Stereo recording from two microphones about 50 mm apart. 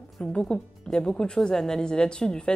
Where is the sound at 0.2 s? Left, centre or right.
Centre.